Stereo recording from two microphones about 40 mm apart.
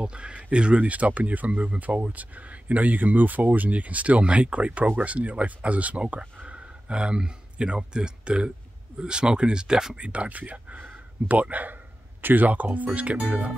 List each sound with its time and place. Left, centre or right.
0.0 s speech: right
9.9 s speech: right